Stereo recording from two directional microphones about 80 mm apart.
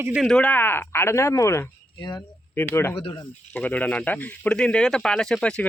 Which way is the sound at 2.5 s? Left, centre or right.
Left.